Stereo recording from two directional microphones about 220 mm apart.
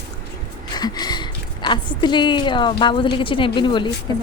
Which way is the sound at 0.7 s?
20° left (ahead or behind).